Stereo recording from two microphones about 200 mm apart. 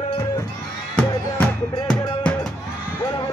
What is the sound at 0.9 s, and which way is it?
Music, 5° left (ahead or behind).